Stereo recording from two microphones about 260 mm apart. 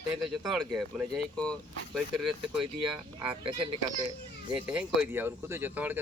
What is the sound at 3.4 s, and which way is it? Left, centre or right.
Speech, centre.